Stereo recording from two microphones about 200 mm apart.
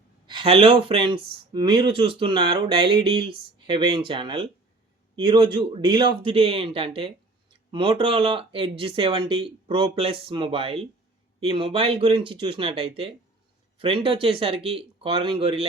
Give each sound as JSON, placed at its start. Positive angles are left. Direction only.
{"t": 0.3, "sound": "speech", "side_deg": -25}